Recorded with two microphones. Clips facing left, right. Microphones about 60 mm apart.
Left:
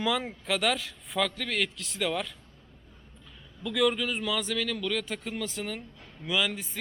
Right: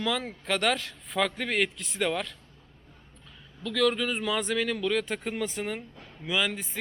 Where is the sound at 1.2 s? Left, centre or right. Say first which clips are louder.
Right 3 dB; centre.